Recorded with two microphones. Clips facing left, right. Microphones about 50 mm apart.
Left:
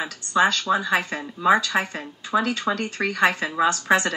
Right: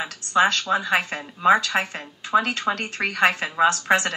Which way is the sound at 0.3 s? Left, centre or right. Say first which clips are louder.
Even; right.